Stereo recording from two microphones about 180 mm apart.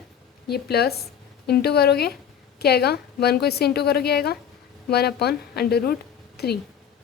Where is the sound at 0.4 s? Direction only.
60° left (ahead or behind).